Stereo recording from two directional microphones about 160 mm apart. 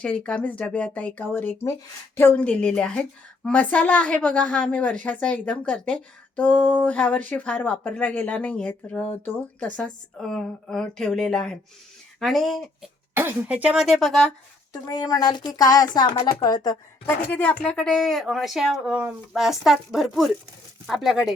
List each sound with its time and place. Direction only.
0.0 s a woman's voice: 5° left (ahead or behind)
13.1 s speech: 10° right (ahead or behind)
14.7 s a woman's voice: 25° left (ahead or behind)
17.3 s speech: 10° left (ahead or behind)